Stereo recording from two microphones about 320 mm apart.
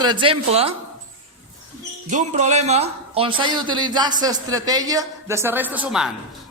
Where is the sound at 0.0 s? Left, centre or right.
Centre.